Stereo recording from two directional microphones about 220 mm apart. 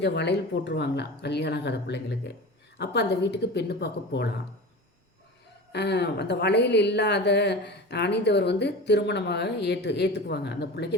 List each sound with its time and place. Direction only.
0.0 s speech: 50° left (ahead or behind)
5.7 s speech: 50° left (ahead or behind)